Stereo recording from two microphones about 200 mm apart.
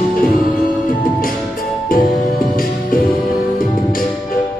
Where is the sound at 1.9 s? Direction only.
45° left (ahead or behind).